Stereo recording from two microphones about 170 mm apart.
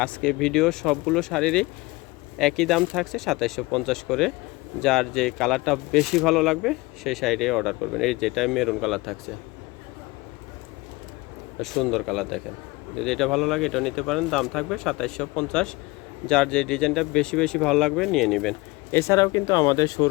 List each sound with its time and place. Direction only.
0.0 s speech: 5° left (ahead or behind)
11.6 s speech: centre (ahead or behind)
18.9 s speech: 15° left (ahead or behind)